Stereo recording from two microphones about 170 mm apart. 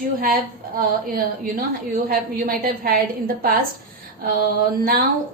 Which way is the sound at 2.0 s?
60° right (ahead or behind).